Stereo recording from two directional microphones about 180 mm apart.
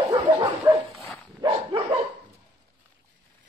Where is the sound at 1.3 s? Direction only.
30° right (ahead or behind).